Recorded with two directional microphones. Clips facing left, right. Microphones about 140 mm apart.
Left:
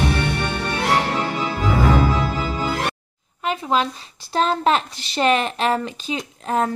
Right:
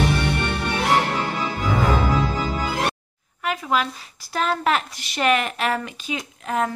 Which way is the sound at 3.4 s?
25° left (ahead or behind).